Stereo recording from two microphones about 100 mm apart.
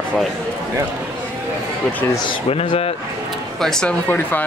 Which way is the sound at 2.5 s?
80° left.